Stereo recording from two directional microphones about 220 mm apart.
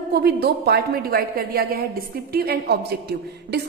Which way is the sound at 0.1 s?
45° right (ahead or behind).